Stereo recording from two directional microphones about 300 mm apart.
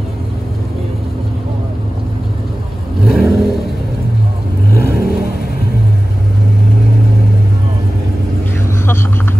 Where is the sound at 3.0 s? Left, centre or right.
Centre.